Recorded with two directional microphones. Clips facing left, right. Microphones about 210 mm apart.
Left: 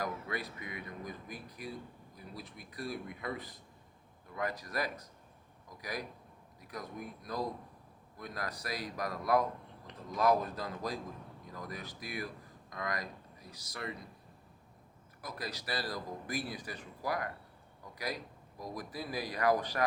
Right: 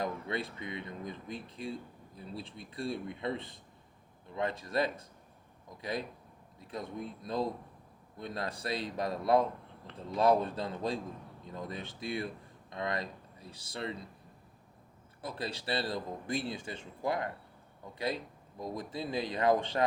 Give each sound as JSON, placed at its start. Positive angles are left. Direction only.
{"t": 0.0, "sound": "a man's voice", "side_deg": -25}
{"t": 15.2, "sound": "a man's voice", "side_deg": -30}